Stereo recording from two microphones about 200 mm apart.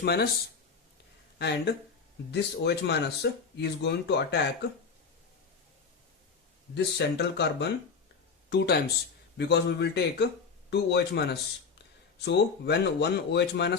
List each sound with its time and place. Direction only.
0.0 s speech: 55° left (ahead or behind)
1.4 s speech: 55° left (ahead or behind)
6.7 s speech: 60° left (ahead or behind)